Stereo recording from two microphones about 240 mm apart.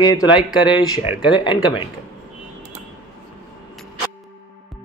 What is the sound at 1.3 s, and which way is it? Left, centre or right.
Speech, centre.